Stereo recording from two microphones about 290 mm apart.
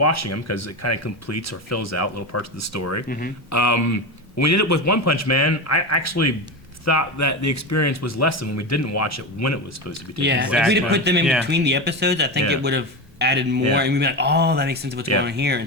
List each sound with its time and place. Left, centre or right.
0.0 s speech: left
3.1 s speech: left
3.5 s speech: left
10.2 s speech: right